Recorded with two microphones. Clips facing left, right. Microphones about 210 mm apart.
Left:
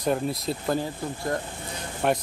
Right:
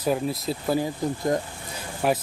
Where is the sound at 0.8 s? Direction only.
20° right (ahead or behind).